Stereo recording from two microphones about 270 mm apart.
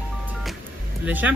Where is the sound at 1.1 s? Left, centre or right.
Centre.